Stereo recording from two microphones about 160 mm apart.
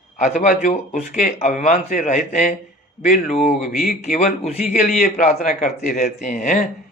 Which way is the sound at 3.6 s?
65° left (ahead or behind).